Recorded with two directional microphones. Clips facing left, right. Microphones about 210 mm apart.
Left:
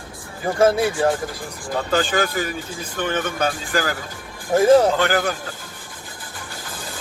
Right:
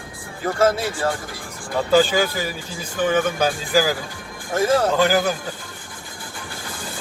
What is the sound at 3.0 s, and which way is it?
Speech, 5° right (ahead or behind).